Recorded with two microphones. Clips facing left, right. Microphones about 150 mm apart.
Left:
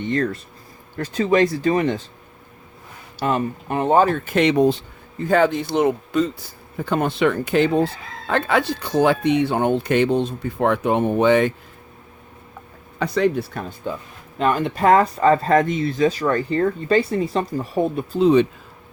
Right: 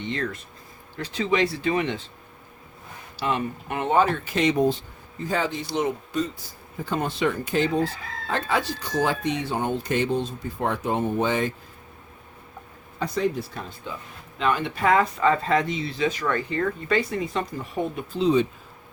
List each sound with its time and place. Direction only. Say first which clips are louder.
0.0 s speech: left 7 dB; 50° left (ahead or behind)
3.2 s speech: left 5 dB; 45° left (ahead or behind)
4.4 s speech: left 5 dB; 70° left (ahead or behind)
5.2 s speech: left 9 dB; 60° left (ahead or behind)
13.0 s speech: left 6 dB; 70° left (ahead or behind); by 16.0 s 50° left (ahead or behind)
16.0 s speech: left 4 dB; 35° left (ahead or behind)
18.2 s speech: left 6 dB; 60° left (ahead or behind)